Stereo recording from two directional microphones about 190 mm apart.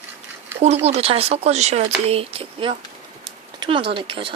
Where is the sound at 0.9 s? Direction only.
30° right (ahead or behind).